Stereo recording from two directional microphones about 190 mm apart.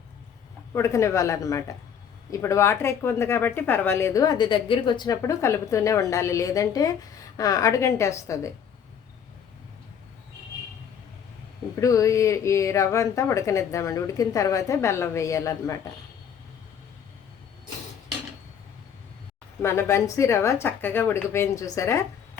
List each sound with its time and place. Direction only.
0.7 s speech: 15° left (ahead or behind)
11.8 s speech: 15° left (ahead or behind)
19.6 s speech: 15° left (ahead or behind)